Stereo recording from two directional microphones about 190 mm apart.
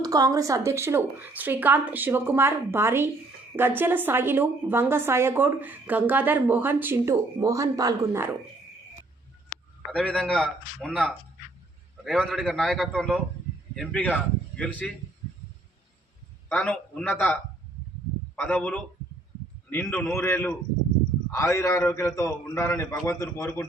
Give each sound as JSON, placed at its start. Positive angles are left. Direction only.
{"t": 0.0, "sound": "a woman's voice", "side_deg": -20}
{"t": 9.9, "sound": "speech", "side_deg": 5}
{"t": 16.5, "sound": "a man's voice", "side_deg": 5}
{"t": 18.3, "sound": "a man's voice", "side_deg": 5}